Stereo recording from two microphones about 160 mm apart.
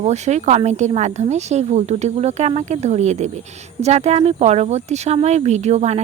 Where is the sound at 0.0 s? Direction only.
45° right (ahead or behind).